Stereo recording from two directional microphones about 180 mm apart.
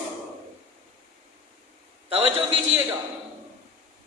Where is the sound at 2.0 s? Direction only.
30° right (ahead or behind).